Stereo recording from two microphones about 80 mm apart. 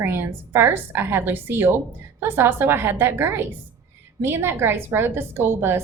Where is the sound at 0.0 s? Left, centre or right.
Right.